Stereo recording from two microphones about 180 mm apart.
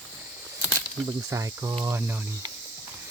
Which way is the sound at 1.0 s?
15° right (ahead or behind).